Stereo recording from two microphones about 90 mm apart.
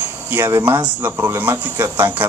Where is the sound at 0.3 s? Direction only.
30° right (ahead or behind).